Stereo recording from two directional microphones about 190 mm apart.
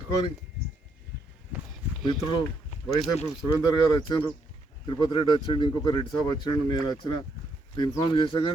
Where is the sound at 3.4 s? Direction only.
20° left (ahead or behind).